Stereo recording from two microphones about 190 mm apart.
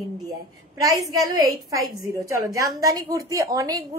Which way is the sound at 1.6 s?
15° right (ahead or behind).